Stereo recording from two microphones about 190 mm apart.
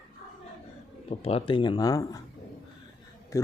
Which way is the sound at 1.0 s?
30° left (ahead or behind).